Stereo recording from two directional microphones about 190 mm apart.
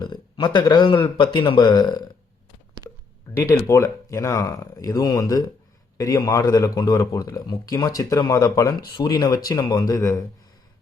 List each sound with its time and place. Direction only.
0.0 s speech: 25° left (ahead or behind)
3.3 s speech: 10° left (ahead or behind)